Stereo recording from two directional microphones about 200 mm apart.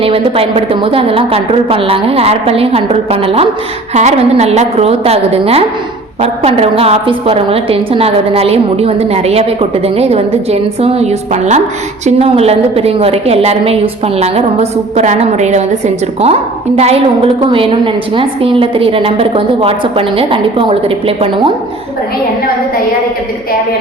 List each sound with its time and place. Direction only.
0.0 s a woman's voice: 30° right (ahead or behind)